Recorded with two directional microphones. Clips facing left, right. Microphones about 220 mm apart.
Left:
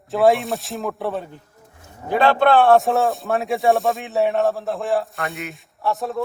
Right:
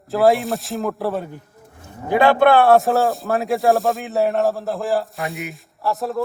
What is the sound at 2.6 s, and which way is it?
Speech, centre (ahead or behind).